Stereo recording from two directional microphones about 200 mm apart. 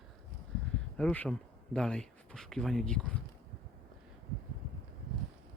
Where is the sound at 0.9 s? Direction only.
5° left (ahead or behind).